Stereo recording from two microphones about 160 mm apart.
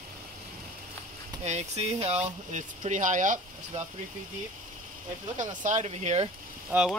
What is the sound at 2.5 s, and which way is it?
Speech, 50° right (ahead or behind).